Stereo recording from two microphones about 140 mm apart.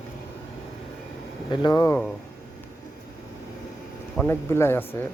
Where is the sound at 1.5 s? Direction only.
30° left (ahead or behind).